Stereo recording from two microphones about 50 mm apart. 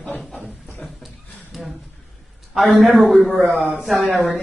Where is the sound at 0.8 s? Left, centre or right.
Centre.